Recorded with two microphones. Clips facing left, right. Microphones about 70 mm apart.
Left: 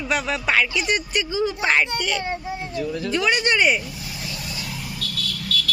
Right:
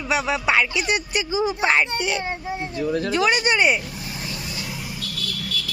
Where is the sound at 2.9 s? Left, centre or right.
Right.